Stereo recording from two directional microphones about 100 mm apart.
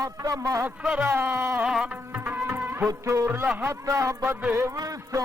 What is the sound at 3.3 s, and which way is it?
Speech, 20° right (ahead or behind).